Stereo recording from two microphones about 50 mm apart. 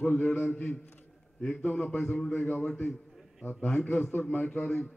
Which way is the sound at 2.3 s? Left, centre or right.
Left.